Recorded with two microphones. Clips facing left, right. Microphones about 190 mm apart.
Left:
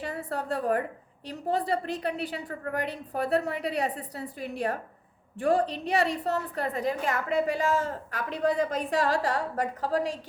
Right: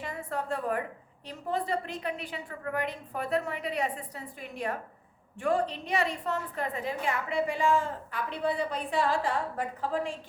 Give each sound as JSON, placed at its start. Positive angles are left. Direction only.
{"t": 0.0, "sound": "a woman's voice", "side_deg": 35}